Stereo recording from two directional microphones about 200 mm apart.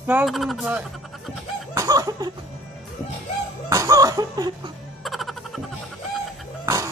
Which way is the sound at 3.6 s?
15° right (ahead or behind).